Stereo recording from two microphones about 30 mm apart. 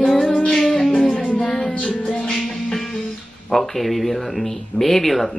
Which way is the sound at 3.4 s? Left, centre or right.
Centre.